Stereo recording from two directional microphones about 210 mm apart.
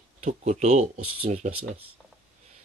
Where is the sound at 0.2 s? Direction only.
35° right (ahead or behind).